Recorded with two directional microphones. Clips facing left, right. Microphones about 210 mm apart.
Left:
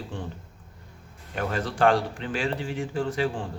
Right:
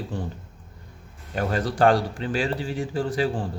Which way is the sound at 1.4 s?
40° right (ahead or behind).